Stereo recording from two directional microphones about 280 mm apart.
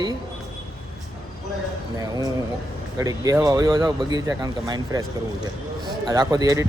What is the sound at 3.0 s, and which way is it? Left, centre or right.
Speech, centre.